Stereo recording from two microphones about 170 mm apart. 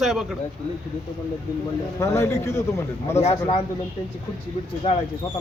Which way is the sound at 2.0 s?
15° left (ahead or behind).